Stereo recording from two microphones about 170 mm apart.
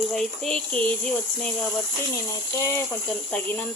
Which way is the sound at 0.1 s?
5° left (ahead or behind).